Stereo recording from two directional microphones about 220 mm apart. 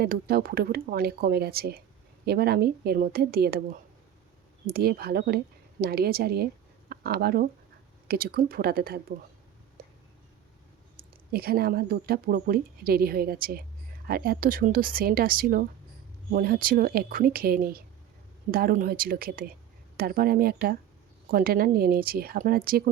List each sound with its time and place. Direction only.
0.0 s a woman's voice: 45° right (ahead or behind)
11.3 s a woman's voice: 45° right (ahead or behind)